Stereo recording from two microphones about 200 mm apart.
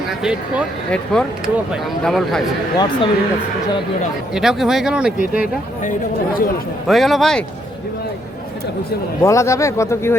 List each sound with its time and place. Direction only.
0.2 s speech: 5° right (ahead or behind)
2.7 s speech: 20° left (ahead or behind)
4.4 s speech: centre (ahead or behind)
5.8 s speech: 40° left (ahead or behind)
6.8 s speech: centre (ahead or behind)
9.2 s speech: 15° left (ahead or behind)